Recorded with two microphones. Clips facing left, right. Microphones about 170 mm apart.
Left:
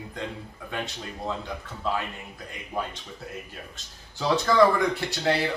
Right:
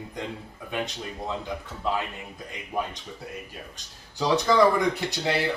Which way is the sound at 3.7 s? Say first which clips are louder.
Right 6 dB; 15° right (ahead or behind).